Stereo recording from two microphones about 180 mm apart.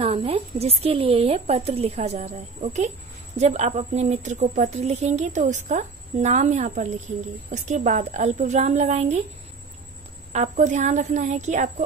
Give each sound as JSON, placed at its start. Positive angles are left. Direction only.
{"t": 0.0, "sound": "a woman's voice", "side_deg": -35}
{"t": 10.3, "sound": "a woman's voice", "side_deg": -40}